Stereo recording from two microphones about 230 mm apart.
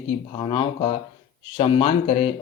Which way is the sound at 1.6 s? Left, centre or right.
Left.